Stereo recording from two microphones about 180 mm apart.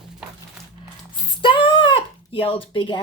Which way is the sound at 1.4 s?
25° left (ahead or behind).